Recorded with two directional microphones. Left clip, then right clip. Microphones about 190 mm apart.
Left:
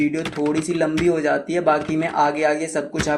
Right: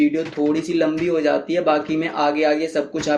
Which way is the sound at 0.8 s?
35° left (ahead or behind).